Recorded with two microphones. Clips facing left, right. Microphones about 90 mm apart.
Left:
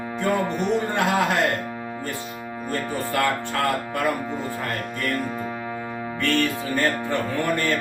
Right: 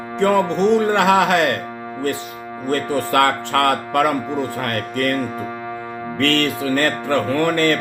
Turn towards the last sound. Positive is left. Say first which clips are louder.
# right 6 dB
turn(degrees=-80)